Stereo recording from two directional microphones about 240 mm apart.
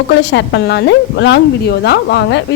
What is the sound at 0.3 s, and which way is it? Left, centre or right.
A woman's voice, left.